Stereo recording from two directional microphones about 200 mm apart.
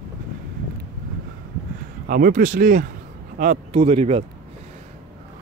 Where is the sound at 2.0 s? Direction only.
45° right (ahead or behind).